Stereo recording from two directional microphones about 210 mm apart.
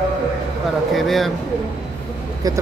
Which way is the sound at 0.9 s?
Centre (ahead or behind).